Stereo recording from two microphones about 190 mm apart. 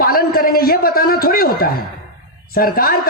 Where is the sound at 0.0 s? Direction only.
50° left (ahead or behind).